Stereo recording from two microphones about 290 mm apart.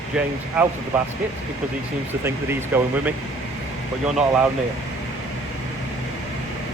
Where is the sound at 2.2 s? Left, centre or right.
Centre.